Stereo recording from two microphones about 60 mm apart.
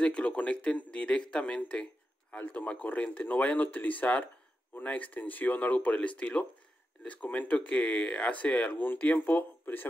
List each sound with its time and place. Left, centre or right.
0.0 s speech: left